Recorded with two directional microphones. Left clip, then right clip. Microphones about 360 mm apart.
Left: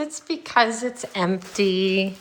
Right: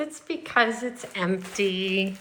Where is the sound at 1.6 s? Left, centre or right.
Left.